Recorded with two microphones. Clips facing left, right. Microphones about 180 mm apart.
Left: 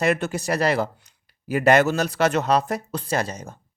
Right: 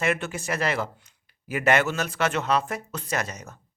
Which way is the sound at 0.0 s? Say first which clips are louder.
Left 5 dB; 35° left (ahead or behind).